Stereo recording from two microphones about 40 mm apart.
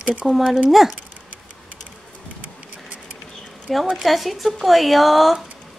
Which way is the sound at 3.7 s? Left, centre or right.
Centre.